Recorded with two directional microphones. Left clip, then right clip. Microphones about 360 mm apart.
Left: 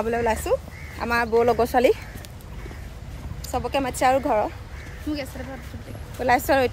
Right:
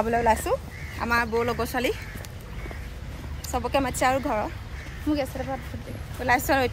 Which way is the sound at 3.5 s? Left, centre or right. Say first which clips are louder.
Left 1 dB; centre.